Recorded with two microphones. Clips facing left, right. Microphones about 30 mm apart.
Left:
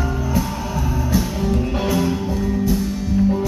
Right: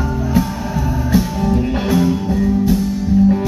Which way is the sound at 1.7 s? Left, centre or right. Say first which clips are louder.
Right 3 dB; centre.